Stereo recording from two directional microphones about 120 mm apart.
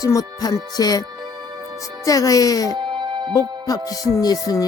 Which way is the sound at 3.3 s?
30° left (ahead or behind).